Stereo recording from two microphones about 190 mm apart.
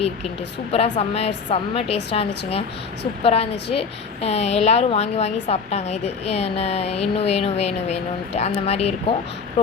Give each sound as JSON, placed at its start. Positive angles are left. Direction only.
{"t": 0.7, "sound": "a woman's voice", "side_deg": 30}